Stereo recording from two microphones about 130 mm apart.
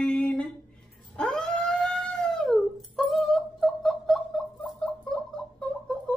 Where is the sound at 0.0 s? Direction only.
10° left (ahead or behind).